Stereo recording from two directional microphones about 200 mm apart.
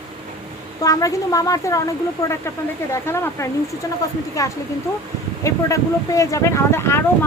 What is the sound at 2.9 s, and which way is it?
Speech, 15° left (ahead or behind).